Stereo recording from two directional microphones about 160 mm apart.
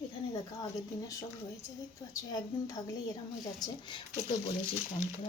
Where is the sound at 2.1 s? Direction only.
20° left (ahead or behind).